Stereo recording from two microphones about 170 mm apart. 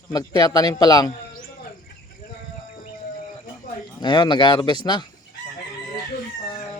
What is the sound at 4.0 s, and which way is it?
Speech, 25° left (ahead or behind).